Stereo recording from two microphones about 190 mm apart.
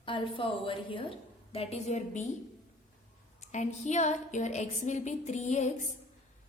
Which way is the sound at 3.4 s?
40° left (ahead or behind).